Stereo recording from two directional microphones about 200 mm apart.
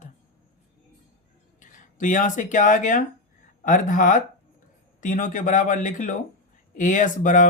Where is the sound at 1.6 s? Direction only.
40° left (ahead or behind).